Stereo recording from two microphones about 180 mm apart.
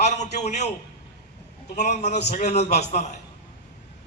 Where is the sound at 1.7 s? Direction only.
40° left (ahead or behind).